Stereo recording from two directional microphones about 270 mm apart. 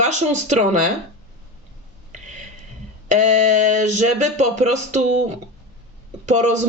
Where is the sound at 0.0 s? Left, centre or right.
Right.